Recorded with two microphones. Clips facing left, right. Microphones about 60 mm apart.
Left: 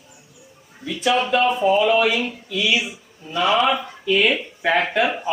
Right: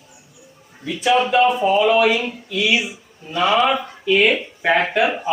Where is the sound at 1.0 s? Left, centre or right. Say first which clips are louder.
Right 3 dB; centre.